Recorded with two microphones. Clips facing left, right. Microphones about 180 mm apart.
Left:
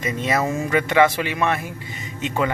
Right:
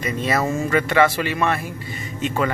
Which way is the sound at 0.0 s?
20° left (ahead or behind).